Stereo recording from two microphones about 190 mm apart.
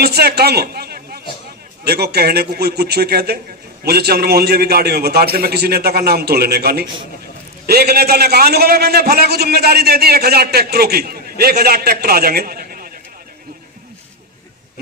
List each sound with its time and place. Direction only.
0.0 s a man's voice: 55° right (ahead or behind)